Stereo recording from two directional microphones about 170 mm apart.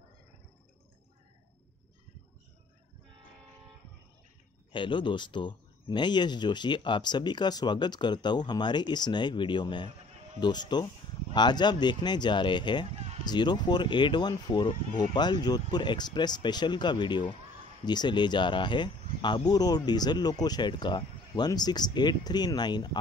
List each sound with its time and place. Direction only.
4.7 s speech: 30° left (ahead or behind)